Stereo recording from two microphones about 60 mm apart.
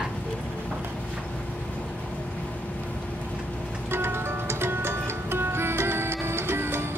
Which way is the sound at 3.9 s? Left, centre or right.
Right.